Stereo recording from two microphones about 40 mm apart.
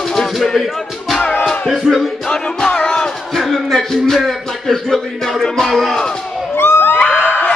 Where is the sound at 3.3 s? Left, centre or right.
Centre.